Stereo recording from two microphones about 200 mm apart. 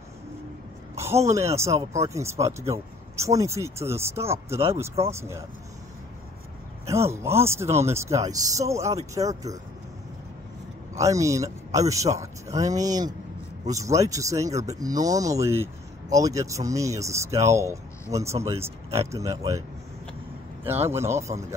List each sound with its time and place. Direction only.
1.2 s speech: 15° right (ahead or behind)
6.9 s speech: 15° right (ahead or behind)
11.0 s speech: 15° right (ahead or behind)
20.6 s speech: 10° right (ahead or behind)